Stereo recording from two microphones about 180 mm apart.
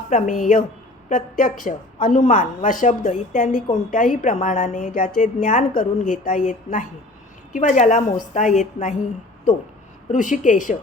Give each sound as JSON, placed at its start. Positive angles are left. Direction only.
{"t": 0.1, "sound": "a woman's voice", "side_deg": 45}
{"t": 10.1, "sound": "a woman's voice", "side_deg": 45}